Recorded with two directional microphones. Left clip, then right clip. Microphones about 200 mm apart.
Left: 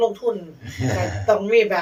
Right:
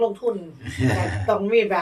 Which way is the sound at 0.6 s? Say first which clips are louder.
Even; 45° right (ahead or behind).